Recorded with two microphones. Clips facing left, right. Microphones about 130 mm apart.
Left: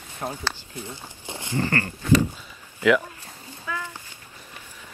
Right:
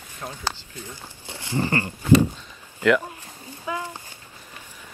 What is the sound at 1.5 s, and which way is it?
Speech, 15° right (ahead or behind).